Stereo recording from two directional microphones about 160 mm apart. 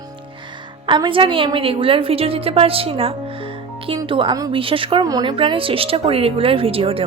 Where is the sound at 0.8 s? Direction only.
30° right (ahead or behind).